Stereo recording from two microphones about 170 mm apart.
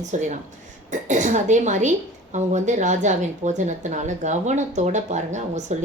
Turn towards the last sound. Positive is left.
turn(degrees=-45)  # may be behind; listen again after turning